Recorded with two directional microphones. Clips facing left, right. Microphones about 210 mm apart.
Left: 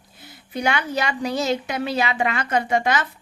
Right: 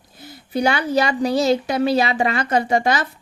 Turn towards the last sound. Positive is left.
turn(degrees=-35)  # may be behind; listen again after turning